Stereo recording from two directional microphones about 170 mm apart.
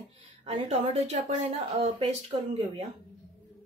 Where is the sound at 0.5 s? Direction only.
40° right (ahead or behind).